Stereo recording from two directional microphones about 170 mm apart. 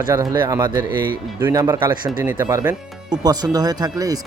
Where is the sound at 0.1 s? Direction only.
20° right (ahead or behind).